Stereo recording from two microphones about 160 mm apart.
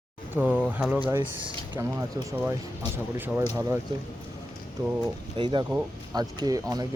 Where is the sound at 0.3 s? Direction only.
10° right (ahead or behind).